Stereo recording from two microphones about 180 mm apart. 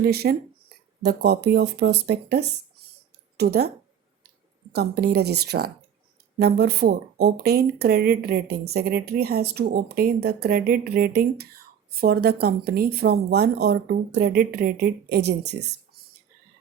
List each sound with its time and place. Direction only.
0.0 s speech: 60° right (ahead or behind)
4.7 s speech: 65° right (ahead or behind)